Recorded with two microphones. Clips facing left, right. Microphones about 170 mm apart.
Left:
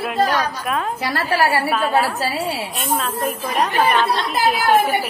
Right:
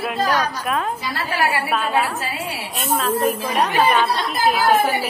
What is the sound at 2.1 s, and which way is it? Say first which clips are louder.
Speech: left 4 dB; 35° left (ahead or behind).